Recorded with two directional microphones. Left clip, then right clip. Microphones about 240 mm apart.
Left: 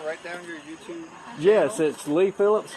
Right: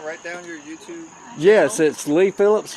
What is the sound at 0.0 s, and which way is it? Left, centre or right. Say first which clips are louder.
Speech: right 2 dB; right.